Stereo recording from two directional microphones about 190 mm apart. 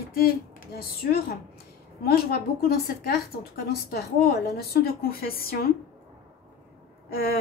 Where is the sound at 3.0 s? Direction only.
55° left (ahead or behind).